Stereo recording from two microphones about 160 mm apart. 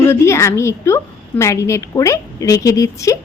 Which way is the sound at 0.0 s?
15° left (ahead or behind).